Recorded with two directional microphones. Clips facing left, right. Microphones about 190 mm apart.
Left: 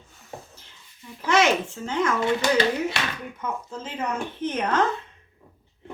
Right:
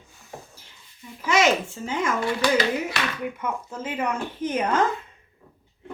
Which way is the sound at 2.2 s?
20° left (ahead or behind).